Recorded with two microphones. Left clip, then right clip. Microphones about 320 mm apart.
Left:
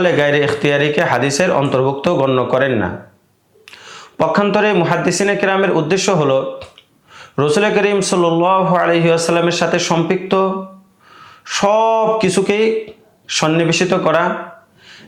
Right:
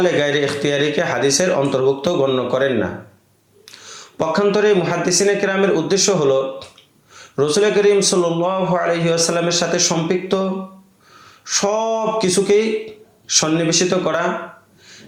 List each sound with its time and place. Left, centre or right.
0.0 s a man's voice: left